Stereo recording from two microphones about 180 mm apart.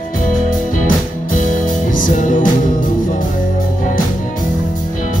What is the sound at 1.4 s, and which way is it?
Music, 45° left (ahead or behind).